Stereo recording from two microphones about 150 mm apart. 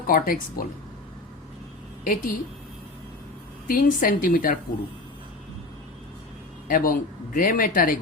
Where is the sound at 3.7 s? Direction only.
70° left (ahead or behind).